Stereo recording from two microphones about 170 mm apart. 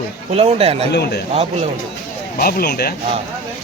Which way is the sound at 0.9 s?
70° left (ahead or behind).